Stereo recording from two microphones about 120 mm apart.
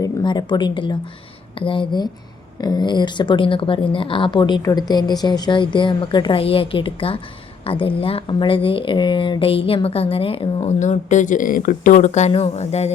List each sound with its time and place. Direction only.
0.0 s a woman's voice: 40° left (ahead or behind); by 12.3 s 80° left
12.3 s speech: 60° left (ahead or behind)